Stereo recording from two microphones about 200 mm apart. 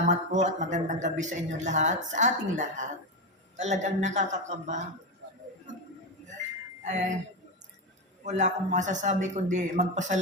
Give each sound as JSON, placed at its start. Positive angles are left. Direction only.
{"t": 0.1, "sound": "a man's voice", "side_deg": -35}
{"t": 6.8, "sound": "a man's voice", "side_deg": -35}
{"t": 8.2, "sound": "a man's voice", "side_deg": -35}